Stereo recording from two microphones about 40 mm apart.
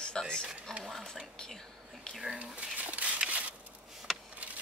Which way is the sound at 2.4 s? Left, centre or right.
Right.